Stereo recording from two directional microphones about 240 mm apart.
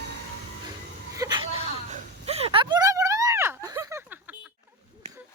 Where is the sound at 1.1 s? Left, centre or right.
Centre.